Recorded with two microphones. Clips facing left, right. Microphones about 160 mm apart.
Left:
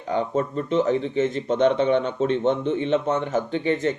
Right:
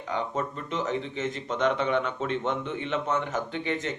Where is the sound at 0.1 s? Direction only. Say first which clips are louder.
Left 7 dB; 35° left (ahead or behind).